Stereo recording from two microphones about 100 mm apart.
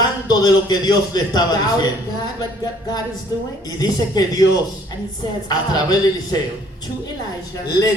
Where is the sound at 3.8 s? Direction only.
40° left (ahead or behind).